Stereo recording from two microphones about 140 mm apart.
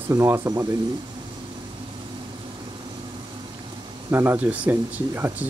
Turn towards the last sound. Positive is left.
turn(degrees=-15)  # may be behind; listen again after turning